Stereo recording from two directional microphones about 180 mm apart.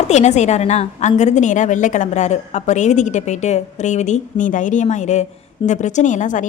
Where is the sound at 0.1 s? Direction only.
40° left (ahead or behind).